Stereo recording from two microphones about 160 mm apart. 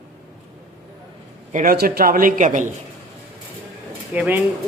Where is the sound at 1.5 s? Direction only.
65° right (ahead or behind).